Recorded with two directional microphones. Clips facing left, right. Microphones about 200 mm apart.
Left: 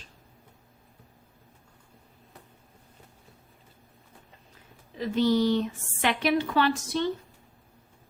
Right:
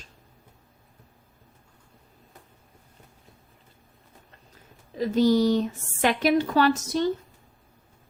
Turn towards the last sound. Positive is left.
turn(degrees=-40)  # may be behind; listen again after turning